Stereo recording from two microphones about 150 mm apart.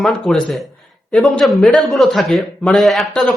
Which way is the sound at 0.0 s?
Centre (ahead or behind).